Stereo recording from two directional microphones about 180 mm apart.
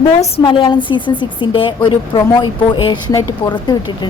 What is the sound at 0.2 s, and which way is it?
A woman's voice, 30° left (ahead or behind).